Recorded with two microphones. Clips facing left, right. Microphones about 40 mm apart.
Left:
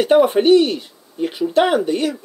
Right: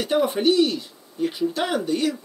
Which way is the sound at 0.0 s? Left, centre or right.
Left.